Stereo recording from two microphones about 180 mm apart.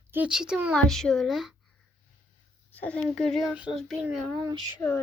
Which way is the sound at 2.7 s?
5° left (ahead or behind).